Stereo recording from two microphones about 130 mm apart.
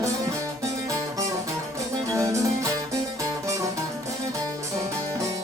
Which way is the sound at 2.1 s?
25° right (ahead or behind).